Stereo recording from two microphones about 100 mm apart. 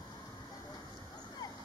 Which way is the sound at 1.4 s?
45° left (ahead or behind).